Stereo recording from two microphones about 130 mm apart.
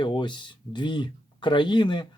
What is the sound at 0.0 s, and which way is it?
Speech, 35° left (ahead or behind).